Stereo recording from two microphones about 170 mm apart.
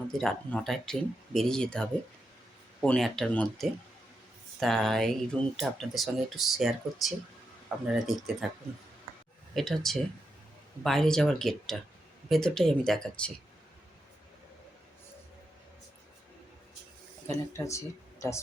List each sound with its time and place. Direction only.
0.2 s speech: centre (ahead or behind)
9.6 s speech: centre (ahead or behind)
17.5 s speech: 15° left (ahead or behind)